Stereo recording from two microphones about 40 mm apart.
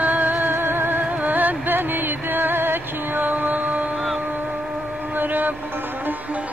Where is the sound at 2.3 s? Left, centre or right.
Right.